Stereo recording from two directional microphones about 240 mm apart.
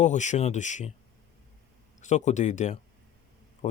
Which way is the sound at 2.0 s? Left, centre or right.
Left.